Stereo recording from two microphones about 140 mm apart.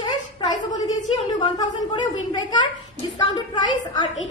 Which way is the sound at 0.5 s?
60° left (ahead or behind).